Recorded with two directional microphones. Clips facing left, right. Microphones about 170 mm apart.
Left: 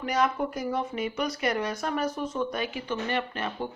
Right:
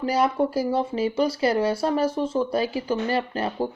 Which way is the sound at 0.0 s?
30° right (ahead or behind).